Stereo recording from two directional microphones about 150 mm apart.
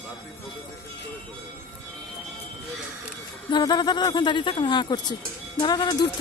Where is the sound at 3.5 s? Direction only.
30° left (ahead or behind).